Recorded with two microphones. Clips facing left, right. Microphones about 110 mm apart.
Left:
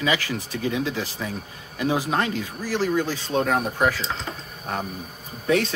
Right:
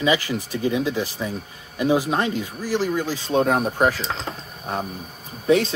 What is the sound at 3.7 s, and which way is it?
Speech, 35° right (ahead or behind).